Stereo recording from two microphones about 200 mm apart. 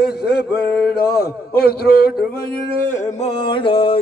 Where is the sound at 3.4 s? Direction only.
25° left (ahead or behind).